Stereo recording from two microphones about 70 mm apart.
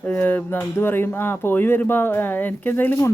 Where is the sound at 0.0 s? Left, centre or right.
Left.